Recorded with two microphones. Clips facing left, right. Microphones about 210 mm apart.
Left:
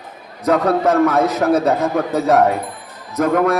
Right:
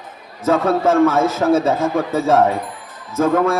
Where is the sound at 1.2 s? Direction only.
25° right (ahead or behind).